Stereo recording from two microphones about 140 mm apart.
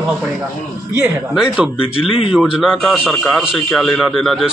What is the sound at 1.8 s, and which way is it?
Speech, 40° left (ahead or behind).